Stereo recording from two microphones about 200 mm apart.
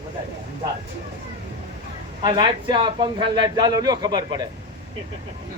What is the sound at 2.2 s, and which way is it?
A man's voice, 20° right (ahead or behind).